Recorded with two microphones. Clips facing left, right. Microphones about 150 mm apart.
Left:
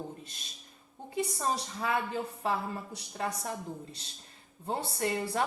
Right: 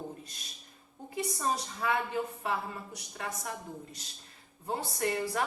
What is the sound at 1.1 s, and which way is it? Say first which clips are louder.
A woman's voice: left 1 dB; 30° left (ahead or behind).